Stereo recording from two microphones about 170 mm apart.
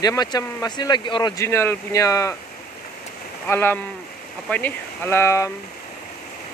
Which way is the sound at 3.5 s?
15° left (ahead or behind).